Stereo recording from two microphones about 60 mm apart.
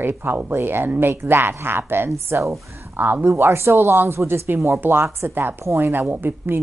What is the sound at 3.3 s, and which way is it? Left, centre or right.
Speech, right.